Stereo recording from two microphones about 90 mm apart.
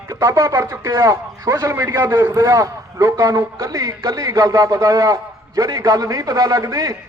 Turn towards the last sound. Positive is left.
turn(degrees=-35)  # may be behind; listen again after turning